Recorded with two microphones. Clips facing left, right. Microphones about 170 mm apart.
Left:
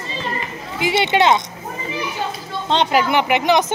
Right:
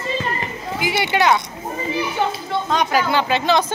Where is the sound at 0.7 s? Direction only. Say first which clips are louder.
Left 3 dB; 25° left (ahead or behind).